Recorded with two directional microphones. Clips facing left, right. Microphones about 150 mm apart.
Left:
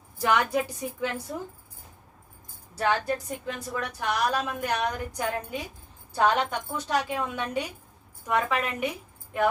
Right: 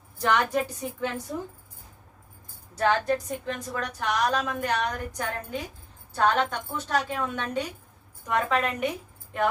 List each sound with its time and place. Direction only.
0.2 s a woman's voice: 10° left (ahead or behind)
2.7 s a woman's voice: 10° left (ahead or behind)